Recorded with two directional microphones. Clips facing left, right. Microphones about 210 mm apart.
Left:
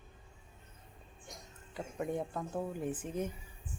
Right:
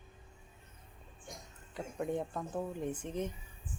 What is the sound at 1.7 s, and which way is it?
Speech, centre (ahead or behind).